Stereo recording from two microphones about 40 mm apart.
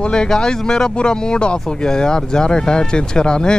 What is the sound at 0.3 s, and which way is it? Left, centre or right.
Speech, centre.